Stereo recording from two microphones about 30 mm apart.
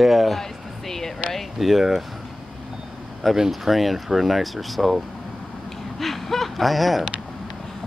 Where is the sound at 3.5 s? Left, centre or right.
Centre.